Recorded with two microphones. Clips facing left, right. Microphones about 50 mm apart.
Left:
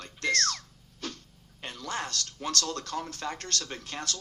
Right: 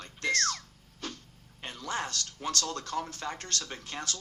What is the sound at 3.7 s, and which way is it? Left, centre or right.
Speech, left.